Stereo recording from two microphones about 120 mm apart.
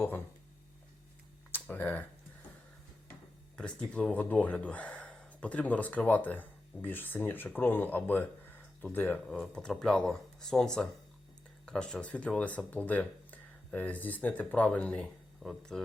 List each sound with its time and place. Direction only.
1.6 s a sound: 15° left (ahead or behind)
3.5 s speech: 10° left (ahead or behind)
9.2 s speech: centre (ahead or behind)